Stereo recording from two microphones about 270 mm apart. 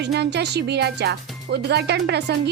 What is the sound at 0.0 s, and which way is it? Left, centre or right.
Speech, right.